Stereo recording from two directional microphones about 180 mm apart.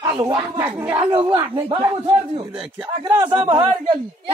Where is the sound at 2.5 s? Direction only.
10° right (ahead or behind).